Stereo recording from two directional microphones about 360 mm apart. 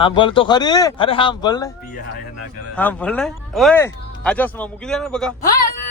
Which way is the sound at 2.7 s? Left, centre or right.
Centre.